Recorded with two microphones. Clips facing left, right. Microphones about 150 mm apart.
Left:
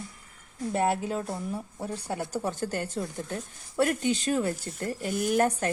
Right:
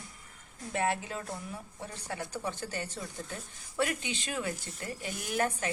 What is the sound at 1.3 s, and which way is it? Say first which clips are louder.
Speech: left 7 dB; 35° left (ahead or behind).